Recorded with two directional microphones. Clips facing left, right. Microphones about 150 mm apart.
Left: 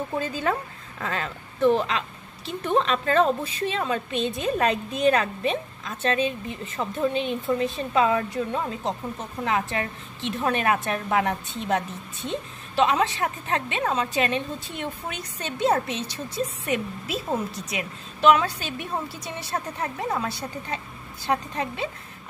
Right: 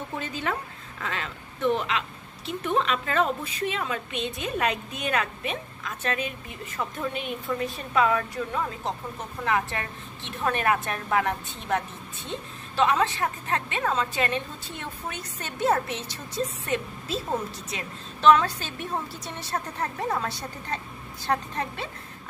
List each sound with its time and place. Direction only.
0.2 s a woman's voice: 40° left (ahead or behind); by 21.8 s 15° left (ahead or behind)